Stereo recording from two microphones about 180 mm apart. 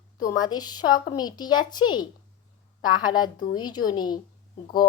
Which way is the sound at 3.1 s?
25° left (ahead or behind).